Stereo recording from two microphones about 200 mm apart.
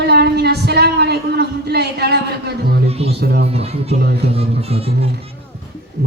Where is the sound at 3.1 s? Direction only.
55° right (ahead or behind).